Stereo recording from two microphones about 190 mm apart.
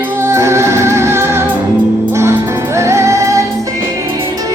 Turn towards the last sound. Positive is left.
turn(degrees=-15)  # may be behind; listen again after turning